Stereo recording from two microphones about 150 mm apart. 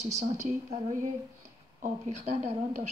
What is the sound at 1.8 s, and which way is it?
Speech, 45° right (ahead or behind).